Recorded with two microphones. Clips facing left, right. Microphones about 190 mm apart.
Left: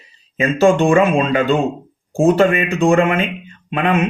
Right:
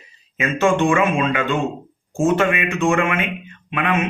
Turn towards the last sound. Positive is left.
turn(degrees=35)  # may be behind; listen again after turning